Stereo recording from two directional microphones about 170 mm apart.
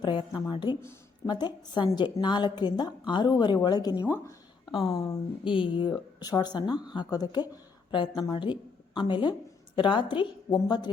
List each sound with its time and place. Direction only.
0.0 s speech: 25° left (ahead or behind)